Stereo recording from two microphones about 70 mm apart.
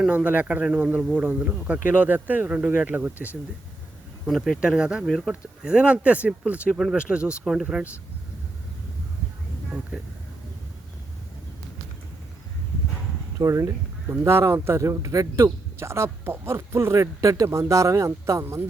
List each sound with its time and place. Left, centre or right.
0.1 s speech: right
4.3 s speech: centre
4.7 s speech: centre
5.0 s speech: centre
5.6 s speech: centre
6.7 s speech: centre
13.4 s speech: right
15.8 s speech: right